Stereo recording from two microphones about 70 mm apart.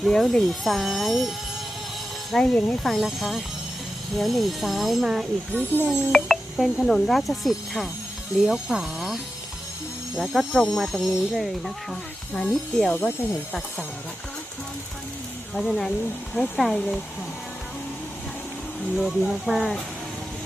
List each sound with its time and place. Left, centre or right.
0.0 s speech: centre
2.3 s speech: centre
5.5 s speech: right
5.9 s speech: centre
15.5 s speech: centre
16.7 s speech: centre
18.9 s speech: centre